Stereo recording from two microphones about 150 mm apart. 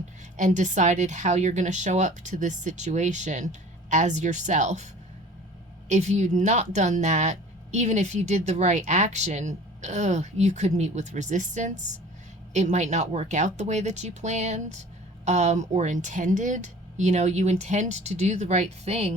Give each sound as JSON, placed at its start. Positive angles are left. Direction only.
{"t": 0.3, "sound": "speech", "side_deg": -55}
{"t": 5.9, "sound": "speech", "side_deg": -50}